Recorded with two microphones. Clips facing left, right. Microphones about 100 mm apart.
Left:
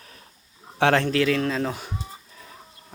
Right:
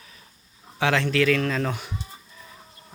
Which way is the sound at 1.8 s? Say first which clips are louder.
Left 1 dB; 35° left (ahead or behind).